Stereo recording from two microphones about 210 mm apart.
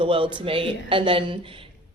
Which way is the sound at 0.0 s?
25° right (ahead or behind).